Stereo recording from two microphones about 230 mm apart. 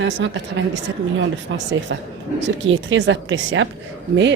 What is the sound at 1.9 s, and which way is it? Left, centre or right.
A woman's voice, right.